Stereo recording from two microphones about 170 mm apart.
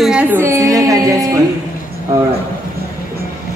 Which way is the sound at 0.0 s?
5° right (ahead or behind).